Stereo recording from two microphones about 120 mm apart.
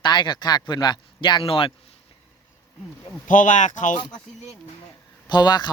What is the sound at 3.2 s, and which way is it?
Speech, 90° left.